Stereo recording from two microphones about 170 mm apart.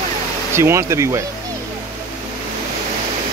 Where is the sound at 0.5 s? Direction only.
15° right (ahead or behind).